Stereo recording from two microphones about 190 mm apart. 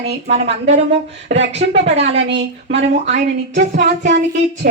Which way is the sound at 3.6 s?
45° right (ahead or behind).